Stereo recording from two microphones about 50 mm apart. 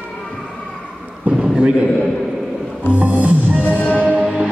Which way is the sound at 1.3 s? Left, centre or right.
Centre.